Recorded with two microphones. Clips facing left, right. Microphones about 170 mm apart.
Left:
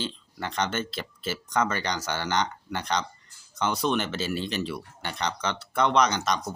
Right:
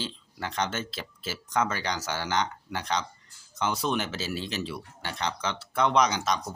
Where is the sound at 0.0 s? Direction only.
5° right (ahead or behind).